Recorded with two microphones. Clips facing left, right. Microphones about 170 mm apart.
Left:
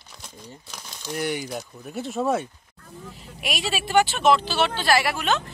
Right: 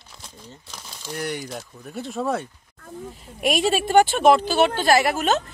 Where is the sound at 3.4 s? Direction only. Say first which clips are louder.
Right 8 dB; 50° right (ahead or behind).